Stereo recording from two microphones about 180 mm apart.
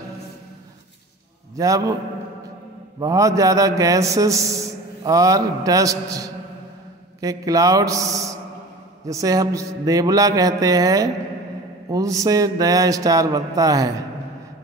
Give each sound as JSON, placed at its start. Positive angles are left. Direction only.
{"t": 1.6, "sound": "a man's voice", "side_deg": -20}
{"t": 3.0, "sound": "a man's voice", "side_deg": -20}